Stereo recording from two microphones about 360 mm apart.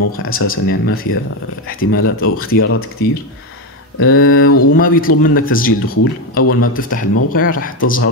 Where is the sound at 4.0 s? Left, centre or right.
Left.